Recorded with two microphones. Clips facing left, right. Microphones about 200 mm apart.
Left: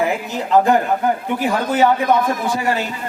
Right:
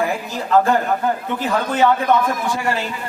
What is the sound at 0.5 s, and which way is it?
Speech, 15° left (ahead or behind).